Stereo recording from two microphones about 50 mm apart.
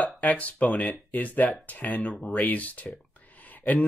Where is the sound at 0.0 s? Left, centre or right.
Left.